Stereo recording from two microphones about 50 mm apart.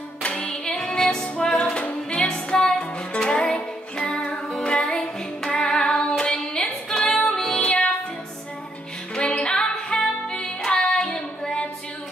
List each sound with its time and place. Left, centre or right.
0.2 s music: left
9.1 s music: centre